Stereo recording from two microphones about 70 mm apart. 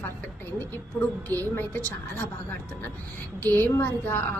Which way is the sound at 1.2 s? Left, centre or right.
Left.